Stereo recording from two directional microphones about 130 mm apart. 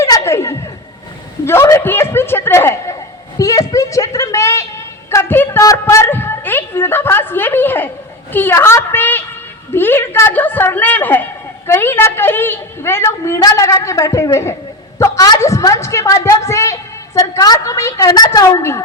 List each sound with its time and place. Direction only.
0.0 s laughter: 20° left (ahead or behind)
1.5 s a woman's voice: 20° left (ahead or behind)